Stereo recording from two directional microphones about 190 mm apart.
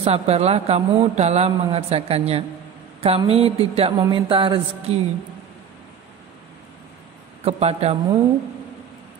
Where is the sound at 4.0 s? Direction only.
25° right (ahead or behind).